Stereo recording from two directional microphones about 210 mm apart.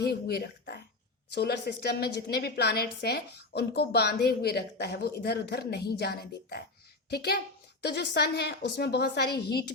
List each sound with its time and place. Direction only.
0.0 s a woman's voice: 50° left (ahead or behind)